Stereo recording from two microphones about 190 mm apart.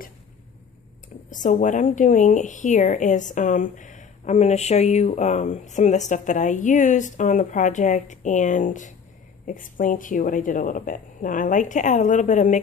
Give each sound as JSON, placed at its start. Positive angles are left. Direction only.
{"t": 1.3, "sound": "a woman's voice", "side_deg": 40}